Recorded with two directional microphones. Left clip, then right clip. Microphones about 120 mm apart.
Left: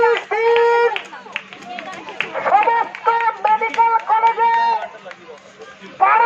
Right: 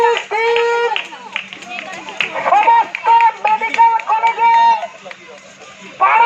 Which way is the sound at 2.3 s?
10° left (ahead or behind).